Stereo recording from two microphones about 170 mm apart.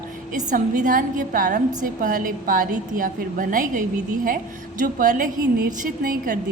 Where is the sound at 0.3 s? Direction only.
50° right (ahead or behind).